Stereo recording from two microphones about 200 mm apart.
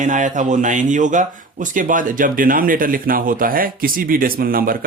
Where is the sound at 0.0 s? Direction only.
40° right (ahead or behind).